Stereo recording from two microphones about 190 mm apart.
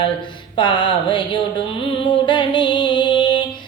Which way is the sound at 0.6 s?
25° left (ahead or behind).